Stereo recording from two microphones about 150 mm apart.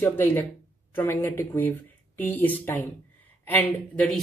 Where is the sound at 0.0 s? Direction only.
15° left (ahead or behind).